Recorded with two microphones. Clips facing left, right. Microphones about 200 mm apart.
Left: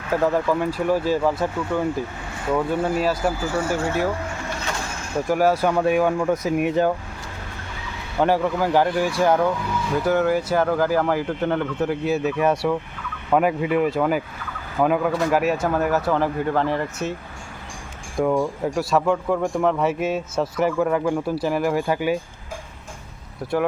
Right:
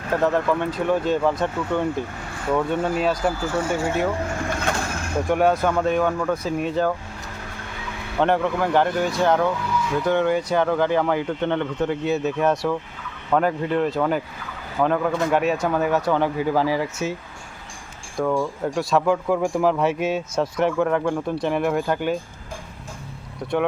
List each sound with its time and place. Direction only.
0.1 s speech: 5° left (ahead or behind)
4.7 s a sound: 55° right (ahead or behind)
5.3 s speech: 5° left (ahead or behind)
8.2 s speech: 5° left (ahead or behind)
18.2 s speech: 15° left (ahead or behind)
18.6 s speech: 5° left (ahead or behind)
23.4 s speech: 5° left (ahead or behind)